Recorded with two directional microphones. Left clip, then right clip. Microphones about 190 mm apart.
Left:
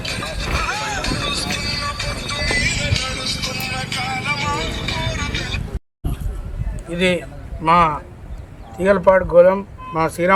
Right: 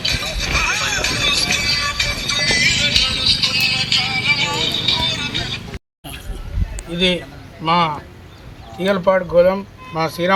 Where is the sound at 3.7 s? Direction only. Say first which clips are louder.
Right 6 dB; 10° left (ahead or behind).